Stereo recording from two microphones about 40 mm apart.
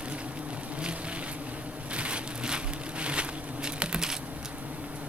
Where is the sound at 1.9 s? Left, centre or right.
Right.